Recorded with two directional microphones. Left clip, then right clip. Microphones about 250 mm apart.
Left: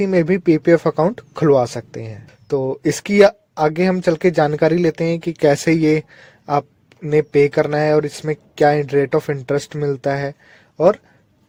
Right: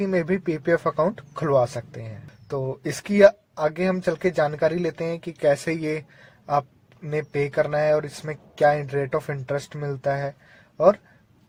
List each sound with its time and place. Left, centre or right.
0.0 s speech: left